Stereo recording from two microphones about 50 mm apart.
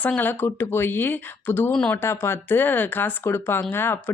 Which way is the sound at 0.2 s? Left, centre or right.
Left.